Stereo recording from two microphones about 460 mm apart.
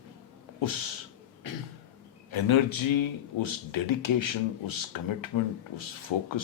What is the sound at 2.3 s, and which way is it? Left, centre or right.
Speech, left.